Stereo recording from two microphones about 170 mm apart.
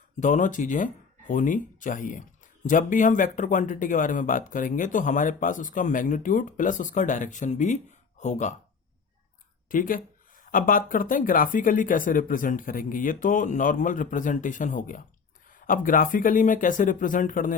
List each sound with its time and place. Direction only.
0.2 s speech: 45° left (ahead or behind)
9.6 s speech: 55° left (ahead or behind)